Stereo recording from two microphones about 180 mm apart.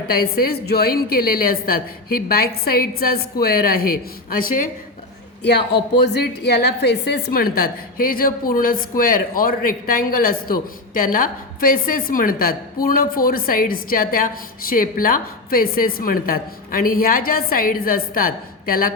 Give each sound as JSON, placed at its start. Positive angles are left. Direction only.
{"t": 0.1, "sound": "a woman's voice", "side_deg": 55}
{"t": 5.4, "sound": "a woman's voice", "side_deg": 65}